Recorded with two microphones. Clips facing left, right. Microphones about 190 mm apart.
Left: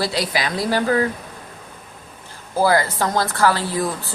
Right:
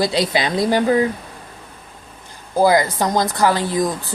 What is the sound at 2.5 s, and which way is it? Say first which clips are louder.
Speech: right 3 dB; 15° right (ahead or behind).